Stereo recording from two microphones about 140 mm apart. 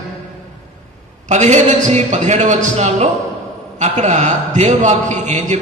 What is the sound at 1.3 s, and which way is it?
A man's voice, 55° right (ahead or behind).